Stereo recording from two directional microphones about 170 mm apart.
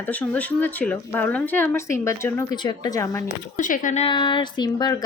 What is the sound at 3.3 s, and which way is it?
Speech, 50° left (ahead or behind).